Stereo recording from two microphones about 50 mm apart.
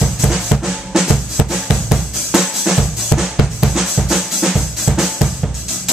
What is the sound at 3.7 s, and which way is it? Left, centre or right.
Drum, centre.